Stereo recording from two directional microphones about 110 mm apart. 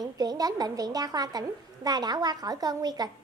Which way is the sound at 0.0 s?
35° right (ahead or behind).